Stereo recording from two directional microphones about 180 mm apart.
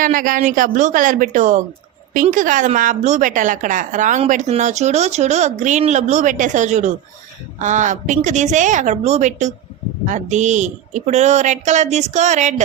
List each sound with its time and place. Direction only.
0.0 s a woman's voice: 50° right (ahead or behind)